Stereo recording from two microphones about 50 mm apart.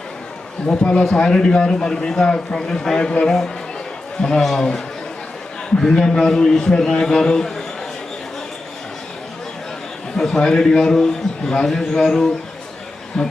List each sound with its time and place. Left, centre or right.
0.6 s a man's voice: left
1.0 s a man's voice: centre
10.2 s a man's voice: centre